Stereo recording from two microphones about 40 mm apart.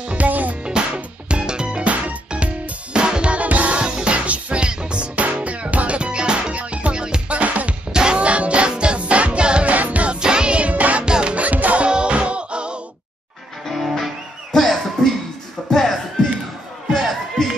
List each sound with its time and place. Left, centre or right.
0.0 s music: right
0.3 s music: right
0.7 s music: right
1.9 s music: right
3.8 s music: right
7.9 s music: right
9.7 s music: right
10.2 s music: right
11.1 s music: right
11.3 s music: right
11.8 s music: right
13.7 s music: centre
14.5 s music: centre